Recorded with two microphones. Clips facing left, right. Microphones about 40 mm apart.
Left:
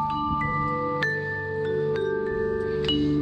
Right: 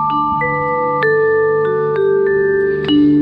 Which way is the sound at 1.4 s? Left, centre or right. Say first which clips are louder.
Right 13 dB; right.